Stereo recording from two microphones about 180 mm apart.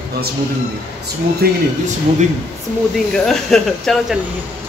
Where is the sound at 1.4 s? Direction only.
60° right (ahead or behind).